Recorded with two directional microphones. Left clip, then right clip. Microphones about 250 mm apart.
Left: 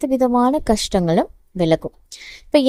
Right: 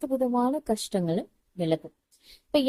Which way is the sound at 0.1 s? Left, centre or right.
Left.